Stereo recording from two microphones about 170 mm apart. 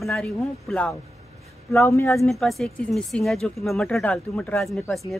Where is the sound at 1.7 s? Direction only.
15° left (ahead or behind).